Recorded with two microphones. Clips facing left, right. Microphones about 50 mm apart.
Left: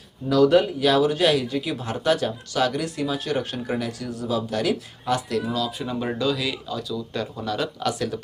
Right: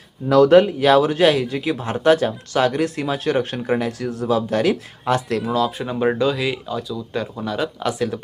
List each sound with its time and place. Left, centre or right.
0.3 s speech: right